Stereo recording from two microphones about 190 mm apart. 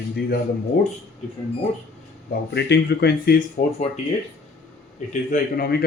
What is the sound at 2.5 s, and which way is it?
Speech, 60° left (ahead or behind).